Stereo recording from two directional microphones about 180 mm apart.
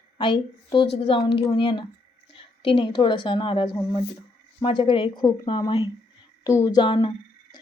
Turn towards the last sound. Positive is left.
turn(degrees=25)  # may be behind; listen again after turning